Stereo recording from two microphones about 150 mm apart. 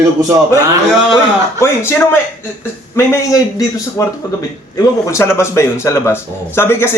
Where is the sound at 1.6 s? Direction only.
15° left (ahead or behind).